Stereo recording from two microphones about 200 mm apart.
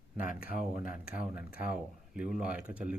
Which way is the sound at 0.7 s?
45° left (ahead or behind).